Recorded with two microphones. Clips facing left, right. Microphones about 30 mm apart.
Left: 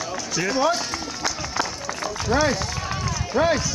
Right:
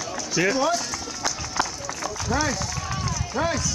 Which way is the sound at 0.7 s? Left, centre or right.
Left.